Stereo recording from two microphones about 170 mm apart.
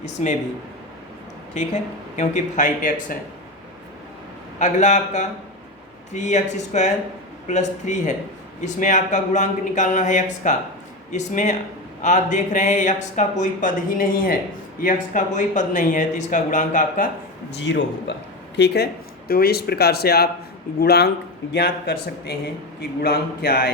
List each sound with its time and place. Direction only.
0.2 s speech: 45° left (ahead or behind)
1.5 s speech: 40° left (ahead or behind)
4.6 s speech: 45° left (ahead or behind)
17.5 s a man's voice: 90° left
19.3 s a man's voice: 65° left (ahead or behind)